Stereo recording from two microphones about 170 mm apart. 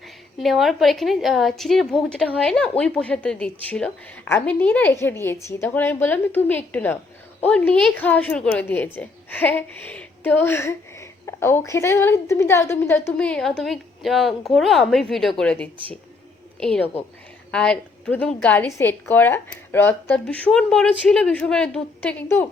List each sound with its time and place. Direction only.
0.3 s a woman's voice: centre (ahead or behind)